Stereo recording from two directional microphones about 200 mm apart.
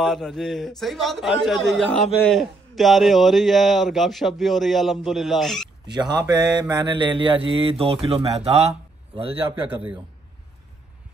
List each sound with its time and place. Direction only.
0.0 s a man's voice: centre (ahead or behind)
5.9 s speech: 20° right (ahead or behind)